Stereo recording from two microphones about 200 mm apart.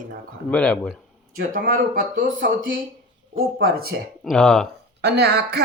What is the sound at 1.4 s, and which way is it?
Speech, 45° right (ahead or behind).